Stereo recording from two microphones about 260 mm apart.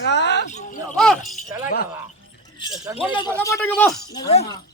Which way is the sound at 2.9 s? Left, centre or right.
Centre.